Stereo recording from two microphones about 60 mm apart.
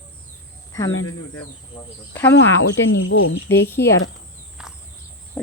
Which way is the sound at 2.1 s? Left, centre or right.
Left.